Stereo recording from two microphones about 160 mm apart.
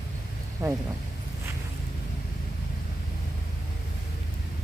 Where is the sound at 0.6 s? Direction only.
20° right (ahead or behind).